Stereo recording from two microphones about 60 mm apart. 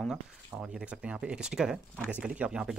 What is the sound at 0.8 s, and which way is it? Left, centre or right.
Speech, centre.